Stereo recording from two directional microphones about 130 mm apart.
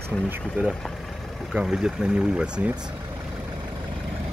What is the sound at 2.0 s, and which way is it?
Speech, 10° right (ahead or behind).